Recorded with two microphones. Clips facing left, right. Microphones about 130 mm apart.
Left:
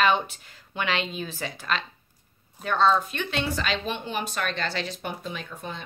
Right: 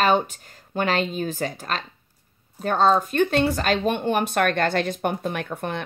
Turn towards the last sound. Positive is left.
turn(degrees=-65)  # may be behind; listen again after turning